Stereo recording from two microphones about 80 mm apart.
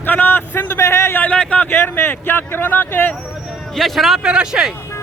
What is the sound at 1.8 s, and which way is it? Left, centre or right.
A man's voice, left.